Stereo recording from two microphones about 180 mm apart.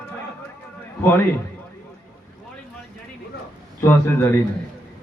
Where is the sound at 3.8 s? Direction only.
15° left (ahead or behind).